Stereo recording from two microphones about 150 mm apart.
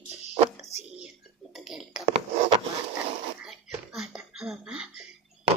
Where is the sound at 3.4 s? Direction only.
Centre (ahead or behind).